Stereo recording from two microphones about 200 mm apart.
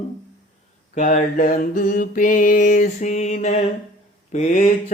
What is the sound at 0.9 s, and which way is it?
Mantra, 40° left (ahead or behind).